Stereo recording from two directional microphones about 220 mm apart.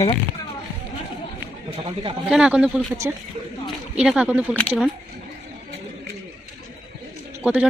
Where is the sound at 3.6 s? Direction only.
5° right (ahead or behind).